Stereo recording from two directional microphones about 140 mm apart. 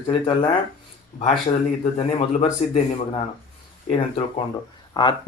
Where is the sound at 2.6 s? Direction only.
50° left (ahead or behind).